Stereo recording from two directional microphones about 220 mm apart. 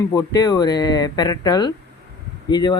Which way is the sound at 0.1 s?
15° left (ahead or behind).